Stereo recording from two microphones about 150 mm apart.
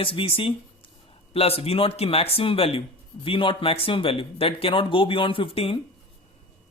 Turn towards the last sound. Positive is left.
turn(degrees=40)  # may be behind; listen again after turning